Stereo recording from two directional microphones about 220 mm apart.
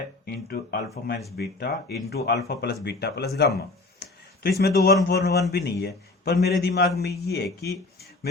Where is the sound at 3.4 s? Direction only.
45° left (ahead or behind).